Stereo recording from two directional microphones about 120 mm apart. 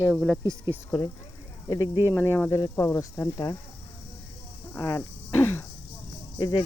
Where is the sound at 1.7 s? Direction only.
30° left (ahead or behind).